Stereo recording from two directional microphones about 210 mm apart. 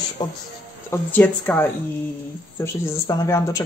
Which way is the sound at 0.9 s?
5° left (ahead or behind).